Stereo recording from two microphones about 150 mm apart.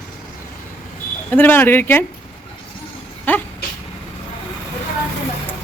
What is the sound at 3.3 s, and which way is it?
Speech, 10° left (ahead or behind).